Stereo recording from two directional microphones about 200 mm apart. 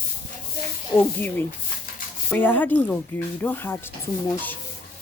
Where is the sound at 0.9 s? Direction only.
10° left (ahead or behind).